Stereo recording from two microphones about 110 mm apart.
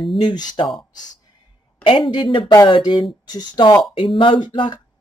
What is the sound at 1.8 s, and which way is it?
Speech, 55° left (ahead or behind).